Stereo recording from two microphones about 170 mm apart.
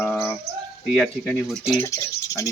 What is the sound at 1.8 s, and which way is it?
Speech, 20° left (ahead or behind).